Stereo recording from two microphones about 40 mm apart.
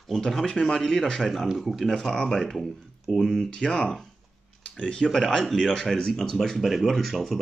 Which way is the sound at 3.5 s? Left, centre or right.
Left.